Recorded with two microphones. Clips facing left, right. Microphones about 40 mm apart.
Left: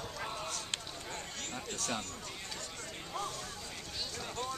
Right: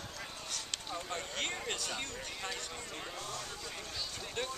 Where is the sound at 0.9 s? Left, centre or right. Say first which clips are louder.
Right 4 dB; right.